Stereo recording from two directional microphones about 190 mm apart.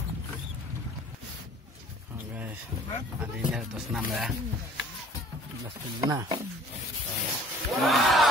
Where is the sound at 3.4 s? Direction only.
5° right (ahead or behind).